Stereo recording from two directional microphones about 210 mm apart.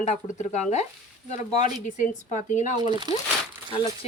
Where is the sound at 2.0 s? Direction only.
35° left (ahead or behind).